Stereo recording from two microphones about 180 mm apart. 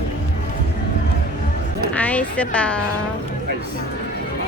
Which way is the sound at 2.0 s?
10° left (ahead or behind).